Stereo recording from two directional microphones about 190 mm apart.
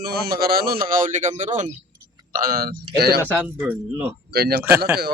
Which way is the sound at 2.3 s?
50° right (ahead or behind).